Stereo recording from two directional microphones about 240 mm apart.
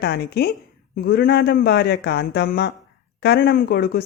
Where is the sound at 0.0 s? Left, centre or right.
Left.